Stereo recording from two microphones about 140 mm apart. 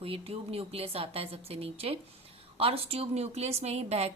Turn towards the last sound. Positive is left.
turn(degrees=-50)  # may be behind; listen again after turning